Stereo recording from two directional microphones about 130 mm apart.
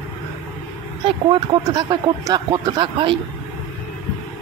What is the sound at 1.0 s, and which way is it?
Speech, 35° right (ahead or behind).